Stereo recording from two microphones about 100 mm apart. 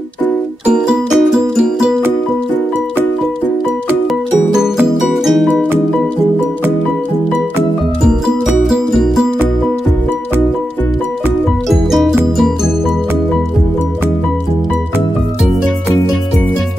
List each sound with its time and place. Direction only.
0.7 s music: 10° right (ahead or behind)
5.2 s music: centre (ahead or behind)
8.5 s music: 5° right (ahead or behind)
11.7 s music: 5° right (ahead or behind)